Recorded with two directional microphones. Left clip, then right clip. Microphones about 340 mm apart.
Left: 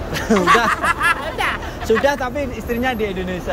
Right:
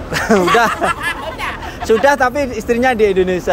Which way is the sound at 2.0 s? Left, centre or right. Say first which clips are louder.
Right 6 dB; centre.